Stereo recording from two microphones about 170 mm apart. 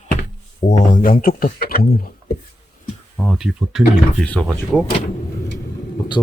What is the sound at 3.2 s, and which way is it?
Speech, centre (ahead or behind).